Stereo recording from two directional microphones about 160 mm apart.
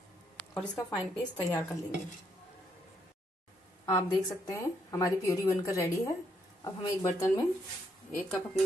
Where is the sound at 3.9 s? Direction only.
15° left (ahead or behind).